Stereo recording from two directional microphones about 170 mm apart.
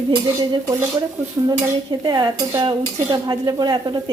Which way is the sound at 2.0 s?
25° right (ahead or behind).